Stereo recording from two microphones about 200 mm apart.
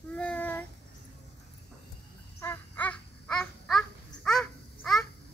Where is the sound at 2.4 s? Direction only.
10° left (ahead or behind).